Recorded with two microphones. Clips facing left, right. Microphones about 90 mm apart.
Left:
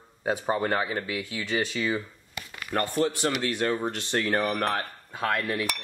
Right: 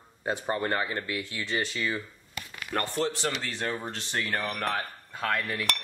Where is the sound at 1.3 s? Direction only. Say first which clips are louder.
Left 4 dB; 20° left (ahead or behind).